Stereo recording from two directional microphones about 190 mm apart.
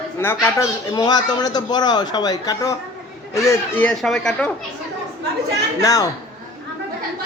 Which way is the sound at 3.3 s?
5° left (ahead or behind).